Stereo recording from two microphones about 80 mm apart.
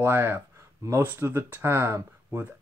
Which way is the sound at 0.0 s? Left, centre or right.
Right.